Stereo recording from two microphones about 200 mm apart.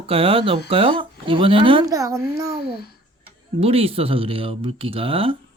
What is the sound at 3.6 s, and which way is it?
Speech, 30° right (ahead or behind).